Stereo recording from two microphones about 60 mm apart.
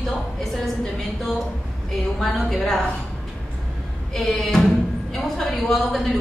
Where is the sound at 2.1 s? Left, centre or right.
Centre.